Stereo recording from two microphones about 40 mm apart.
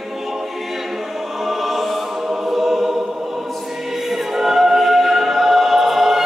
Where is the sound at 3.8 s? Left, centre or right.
Centre.